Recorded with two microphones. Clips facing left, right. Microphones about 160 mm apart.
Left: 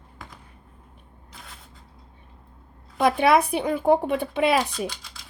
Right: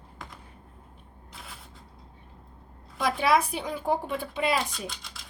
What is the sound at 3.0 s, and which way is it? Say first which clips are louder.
Speech: left 5 dB; 60° left (ahead or behind).